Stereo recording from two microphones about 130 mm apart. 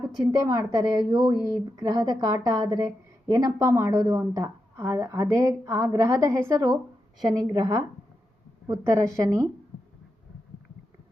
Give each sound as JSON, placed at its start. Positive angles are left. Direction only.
{"t": 0.3, "sound": "a woman's voice", "side_deg": -25}